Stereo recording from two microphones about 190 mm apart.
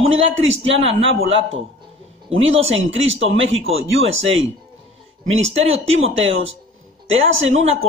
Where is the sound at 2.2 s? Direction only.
90° right.